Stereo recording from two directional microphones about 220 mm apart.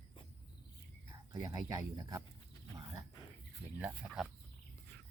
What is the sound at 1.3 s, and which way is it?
Speech, 15° right (ahead or behind).